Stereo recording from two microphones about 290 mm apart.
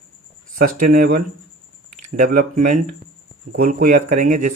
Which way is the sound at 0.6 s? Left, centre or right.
Right.